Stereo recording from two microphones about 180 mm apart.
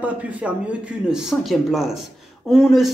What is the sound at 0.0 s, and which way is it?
A man's voice, 10° right (ahead or behind).